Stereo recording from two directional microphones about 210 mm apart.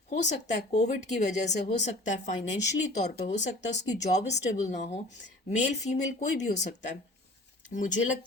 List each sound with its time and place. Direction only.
0.1 s speech: 35° left (ahead or behind)